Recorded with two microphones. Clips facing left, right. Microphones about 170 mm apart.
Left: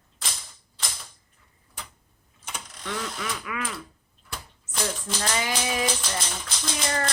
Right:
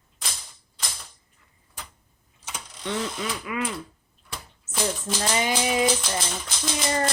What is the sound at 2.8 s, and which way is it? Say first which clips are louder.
Speech: right 4 dB; 25° right (ahead or behind).